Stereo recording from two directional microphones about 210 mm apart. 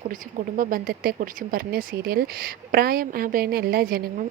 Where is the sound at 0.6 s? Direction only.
40° right (ahead or behind).